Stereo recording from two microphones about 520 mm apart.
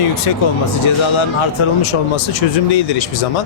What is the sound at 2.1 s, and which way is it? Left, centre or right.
Speech, left.